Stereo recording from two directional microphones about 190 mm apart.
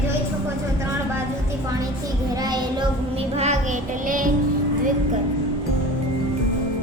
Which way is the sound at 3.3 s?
35° right (ahead or behind).